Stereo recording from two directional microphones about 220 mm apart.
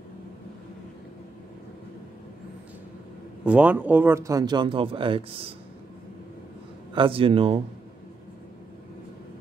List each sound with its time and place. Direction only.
3.4 s speech: 5° right (ahead or behind); by 5.4 s 25° right (ahead or behind)
6.9 s a man's voice: 25° right (ahead or behind)